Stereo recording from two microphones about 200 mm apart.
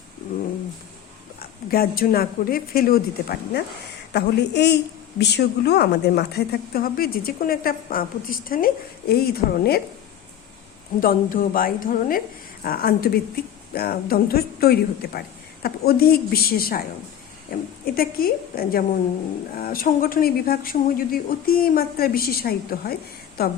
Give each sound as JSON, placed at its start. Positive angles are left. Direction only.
{"t": 1.4, "sound": "speech", "side_deg": 50}
{"t": 4.1, "sound": "a woman's voice", "side_deg": 60}
{"t": 11.0, "sound": "speech", "side_deg": 45}